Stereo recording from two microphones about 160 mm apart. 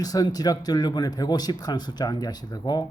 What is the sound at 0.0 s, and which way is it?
Speech, 25° left (ahead or behind).